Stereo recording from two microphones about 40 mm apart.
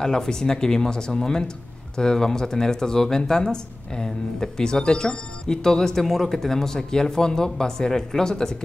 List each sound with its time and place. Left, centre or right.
0.0 s speech: centre